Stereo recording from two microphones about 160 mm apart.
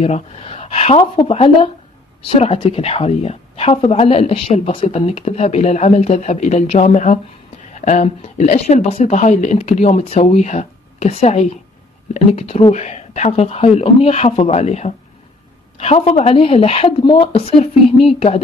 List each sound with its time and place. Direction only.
0.0 s a woman's voice: 40° left (ahead or behind)